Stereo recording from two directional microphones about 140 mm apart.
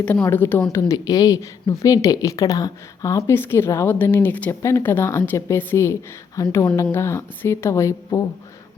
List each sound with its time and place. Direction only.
0.0 s a woman's voice: 10° left (ahead or behind)